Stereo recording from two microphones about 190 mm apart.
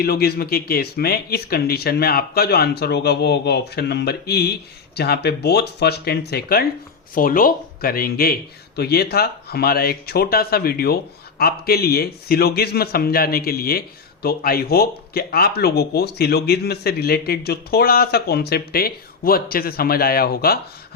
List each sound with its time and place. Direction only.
0.0 s a man's voice: 55° left (ahead or behind)